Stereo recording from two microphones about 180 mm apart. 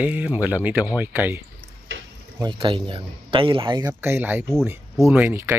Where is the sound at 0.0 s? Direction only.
10° right (ahead or behind).